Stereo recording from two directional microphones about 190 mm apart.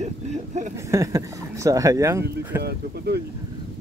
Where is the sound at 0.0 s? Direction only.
40° right (ahead or behind).